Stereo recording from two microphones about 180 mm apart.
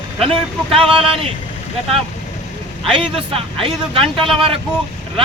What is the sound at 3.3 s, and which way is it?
Speech, 30° right (ahead or behind).